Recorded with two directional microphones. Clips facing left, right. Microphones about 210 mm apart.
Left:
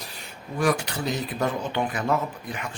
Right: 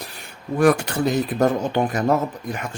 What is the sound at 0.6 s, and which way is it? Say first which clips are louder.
Speech: right 7 dB; 55° right (ahead or behind).